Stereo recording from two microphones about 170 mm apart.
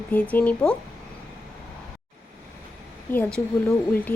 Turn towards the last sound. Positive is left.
turn(degrees=10)  # may be behind; listen again after turning